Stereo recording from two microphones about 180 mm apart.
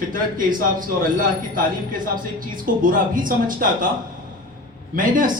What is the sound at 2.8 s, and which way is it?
Speech, 50° right (ahead or behind).